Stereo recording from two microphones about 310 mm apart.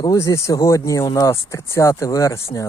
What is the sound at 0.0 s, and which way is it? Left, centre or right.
Speech, centre.